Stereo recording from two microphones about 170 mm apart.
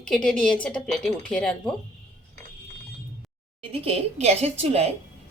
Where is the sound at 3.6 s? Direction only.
35° right (ahead or behind).